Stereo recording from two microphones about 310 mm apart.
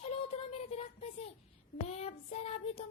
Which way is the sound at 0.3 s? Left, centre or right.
Centre.